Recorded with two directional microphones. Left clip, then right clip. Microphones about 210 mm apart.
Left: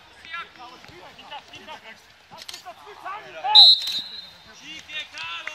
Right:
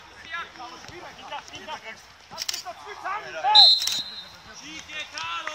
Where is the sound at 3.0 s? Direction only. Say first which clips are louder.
Right 4 dB; 20° right (ahead or behind).